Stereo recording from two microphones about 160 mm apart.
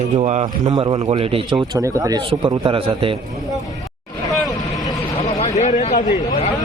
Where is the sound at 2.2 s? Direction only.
30° right (ahead or behind).